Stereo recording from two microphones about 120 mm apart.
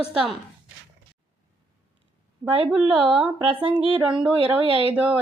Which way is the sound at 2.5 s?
50° right (ahead or behind).